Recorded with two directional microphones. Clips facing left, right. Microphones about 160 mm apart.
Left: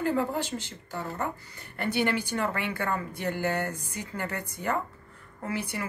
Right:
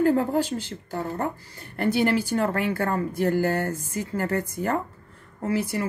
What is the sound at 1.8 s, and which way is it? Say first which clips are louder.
Speech: right 5 dB; 40° right (ahead or behind).